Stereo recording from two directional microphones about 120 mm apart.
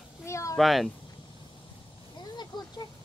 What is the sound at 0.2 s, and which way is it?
Speech, 25° left (ahead or behind).